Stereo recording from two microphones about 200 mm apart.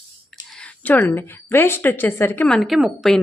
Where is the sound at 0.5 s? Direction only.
5° left (ahead or behind).